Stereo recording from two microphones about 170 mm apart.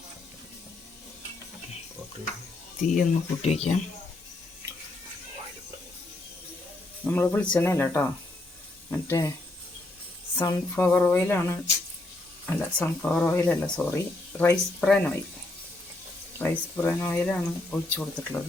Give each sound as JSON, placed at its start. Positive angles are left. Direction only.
{"t": 2.9, "sound": "speech", "side_deg": 45}
{"t": 7.0, "sound": "speech", "side_deg": 10}
{"t": 10.3, "sound": "speech", "side_deg": 15}
{"t": 14.5, "sound": "speech", "side_deg": 5}
{"t": 16.4, "sound": "speech", "side_deg": 10}